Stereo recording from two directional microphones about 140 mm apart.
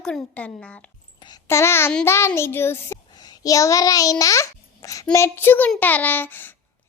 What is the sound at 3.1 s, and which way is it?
A child's voice, 30° left (ahead or behind).